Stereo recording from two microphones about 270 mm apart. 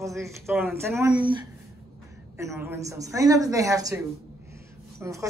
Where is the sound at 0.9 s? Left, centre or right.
Centre.